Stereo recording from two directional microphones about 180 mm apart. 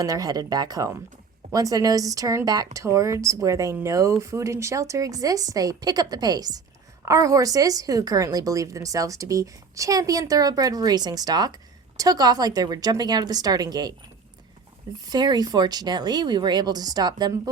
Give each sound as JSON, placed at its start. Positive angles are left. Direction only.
{"t": 0.0, "sound": "a woman's voice", "side_deg": -20}
{"t": 15.0, "sound": "a woman's voice", "side_deg": -20}